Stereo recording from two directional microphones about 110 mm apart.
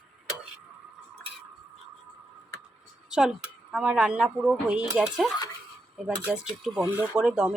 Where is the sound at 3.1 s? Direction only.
5° right (ahead or behind).